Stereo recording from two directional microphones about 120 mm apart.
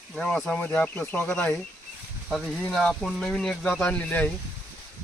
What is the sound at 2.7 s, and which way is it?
Speech, 5° left (ahead or behind).